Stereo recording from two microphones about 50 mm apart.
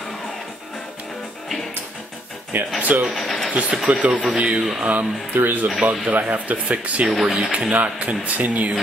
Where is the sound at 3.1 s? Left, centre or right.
Centre.